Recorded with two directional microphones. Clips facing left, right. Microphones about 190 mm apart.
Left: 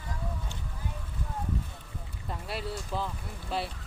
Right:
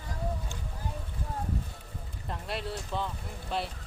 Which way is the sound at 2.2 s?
Centre (ahead or behind).